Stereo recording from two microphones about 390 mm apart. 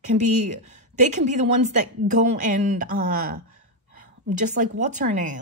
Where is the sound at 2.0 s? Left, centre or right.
Centre.